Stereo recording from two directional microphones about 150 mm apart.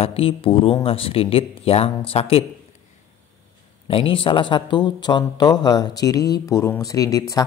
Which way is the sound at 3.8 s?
35° left (ahead or behind).